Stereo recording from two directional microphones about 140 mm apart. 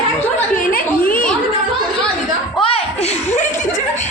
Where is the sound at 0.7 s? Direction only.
85° left.